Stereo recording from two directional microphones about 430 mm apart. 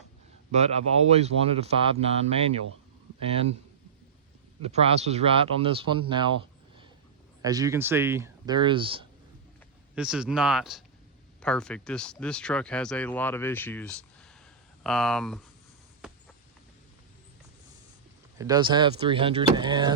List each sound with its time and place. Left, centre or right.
0.5 s speech: centre
4.7 s speech: centre
18.3 s speech: centre